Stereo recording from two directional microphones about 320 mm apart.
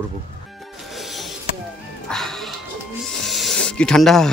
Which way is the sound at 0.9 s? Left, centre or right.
Centre.